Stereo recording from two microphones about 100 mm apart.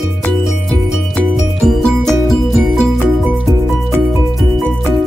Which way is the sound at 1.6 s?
5° left (ahead or behind).